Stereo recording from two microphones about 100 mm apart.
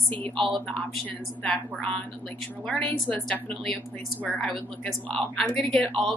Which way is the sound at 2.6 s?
10° left (ahead or behind).